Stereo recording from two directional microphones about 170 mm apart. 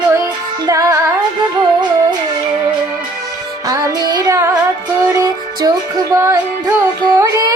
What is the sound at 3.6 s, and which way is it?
Music, 20° right (ahead or behind).